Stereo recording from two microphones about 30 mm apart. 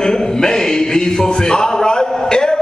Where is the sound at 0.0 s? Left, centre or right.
Left.